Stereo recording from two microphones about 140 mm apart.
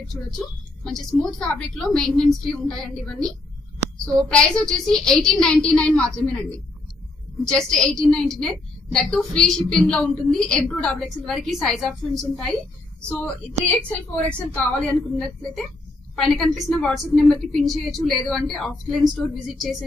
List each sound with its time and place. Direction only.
0.1 s a woman's voice: 5° left (ahead or behind)
7.4 s a woman's voice: 5° left (ahead or behind)
13.1 s a woman's voice: 10° left (ahead or behind)